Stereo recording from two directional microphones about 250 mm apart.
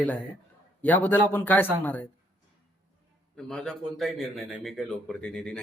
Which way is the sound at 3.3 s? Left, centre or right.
Centre.